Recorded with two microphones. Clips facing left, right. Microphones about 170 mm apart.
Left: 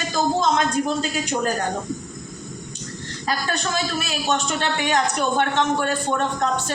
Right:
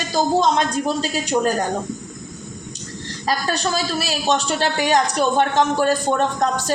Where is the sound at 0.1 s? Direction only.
35° right (ahead or behind).